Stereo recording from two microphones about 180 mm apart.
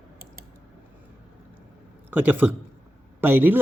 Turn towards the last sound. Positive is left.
turn(degrees=-10)  # may be behind; listen again after turning